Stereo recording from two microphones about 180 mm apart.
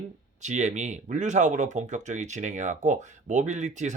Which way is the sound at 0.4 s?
40° right (ahead or behind).